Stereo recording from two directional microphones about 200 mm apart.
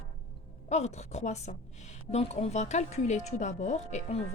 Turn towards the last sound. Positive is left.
turn(degrees=35)  # may be behind; listen again after turning